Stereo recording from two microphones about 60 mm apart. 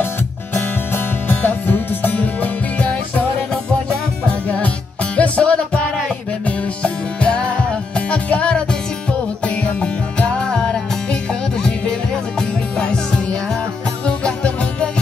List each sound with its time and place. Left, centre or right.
0.6 s music: left
5.1 s music: left
6.8 s music: centre
12.4 s music: centre